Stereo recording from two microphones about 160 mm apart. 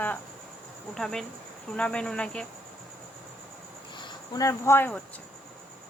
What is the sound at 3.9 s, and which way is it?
Speech, 25° left (ahead or behind).